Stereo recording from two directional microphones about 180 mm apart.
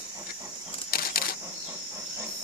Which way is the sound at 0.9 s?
55° left (ahead or behind).